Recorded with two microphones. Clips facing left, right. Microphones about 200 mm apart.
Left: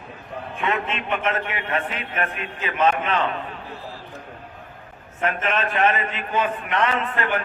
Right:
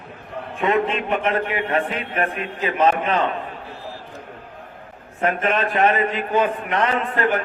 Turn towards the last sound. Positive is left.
turn(degrees=-40)  # may be behind; listen again after turning